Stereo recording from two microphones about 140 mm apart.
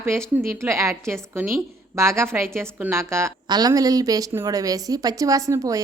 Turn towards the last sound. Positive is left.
turn(degrees=-25)  # may be behind; listen again after turning